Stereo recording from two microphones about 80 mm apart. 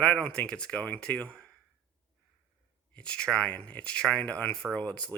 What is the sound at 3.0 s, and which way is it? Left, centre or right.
Speech, centre.